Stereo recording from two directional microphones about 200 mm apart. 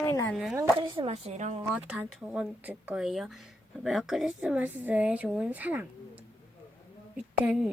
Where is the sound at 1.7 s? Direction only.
5° right (ahead or behind).